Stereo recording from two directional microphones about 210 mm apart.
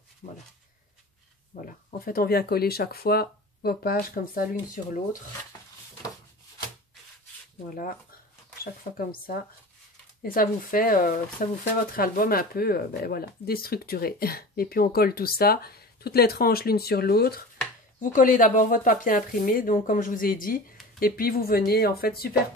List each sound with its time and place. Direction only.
0.2 s speech: 35° left (ahead or behind)
1.5 s speech: 40° left (ahead or behind)
8.9 s speech: 45° left (ahead or behind)